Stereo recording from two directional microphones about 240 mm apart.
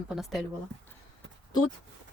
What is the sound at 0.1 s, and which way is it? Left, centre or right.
Speech, centre.